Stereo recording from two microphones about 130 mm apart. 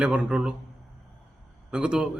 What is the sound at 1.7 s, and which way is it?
Speech, 5° right (ahead or behind).